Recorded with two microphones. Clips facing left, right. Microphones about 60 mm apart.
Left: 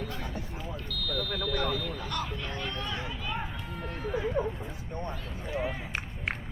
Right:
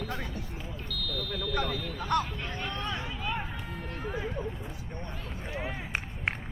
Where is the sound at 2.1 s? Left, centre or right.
Right.